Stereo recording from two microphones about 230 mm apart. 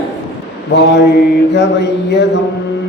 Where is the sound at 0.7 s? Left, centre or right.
Left.